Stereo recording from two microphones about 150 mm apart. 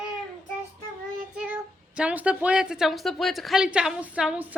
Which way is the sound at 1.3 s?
10° right (ahead or behind).